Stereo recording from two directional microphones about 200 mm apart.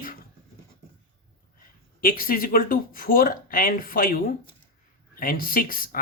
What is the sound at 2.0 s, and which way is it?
Speech, 45° left (ahead or behind).